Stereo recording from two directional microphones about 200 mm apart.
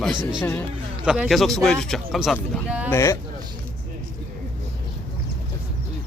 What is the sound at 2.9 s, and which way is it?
Speech, 15° left (ahead or behind).